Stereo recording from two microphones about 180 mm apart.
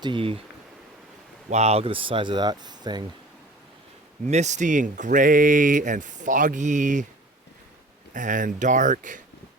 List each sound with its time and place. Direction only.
0.0 s speech: 30° right (ahead or behind)
1.5 s speech: 35° right (ahead or behind)
4.3 s speech: 40° right (ahead or behind)
8.1 s speech: 45° right (ahead or behind)